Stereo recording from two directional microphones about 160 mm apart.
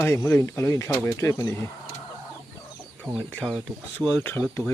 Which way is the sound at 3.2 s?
5° left (ahead or behind).